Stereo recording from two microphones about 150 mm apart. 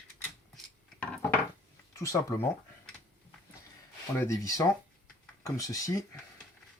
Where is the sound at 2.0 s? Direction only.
20° left (ahead or behind).